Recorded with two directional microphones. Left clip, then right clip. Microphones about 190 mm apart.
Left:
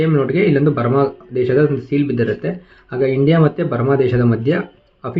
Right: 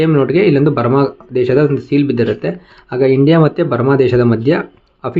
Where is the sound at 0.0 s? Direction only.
35° right (ahead or behind).